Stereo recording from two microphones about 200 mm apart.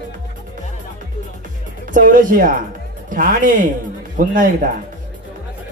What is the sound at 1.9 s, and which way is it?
Speech, 40° right (ahead or behind).